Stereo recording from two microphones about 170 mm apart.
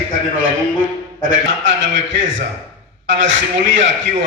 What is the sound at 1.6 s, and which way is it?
A man's voice, 90° right.